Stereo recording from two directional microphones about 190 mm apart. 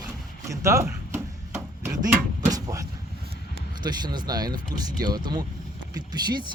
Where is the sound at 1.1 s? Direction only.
5° right (ahead or behind).